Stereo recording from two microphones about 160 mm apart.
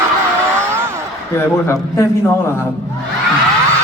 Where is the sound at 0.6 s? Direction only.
15° right (ahead or behind).